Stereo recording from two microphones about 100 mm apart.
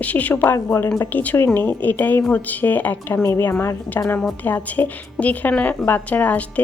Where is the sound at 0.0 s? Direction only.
15° left (ahead or behind).